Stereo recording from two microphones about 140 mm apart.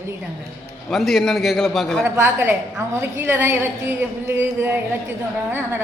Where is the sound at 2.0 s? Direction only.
20° right (ahead or behind).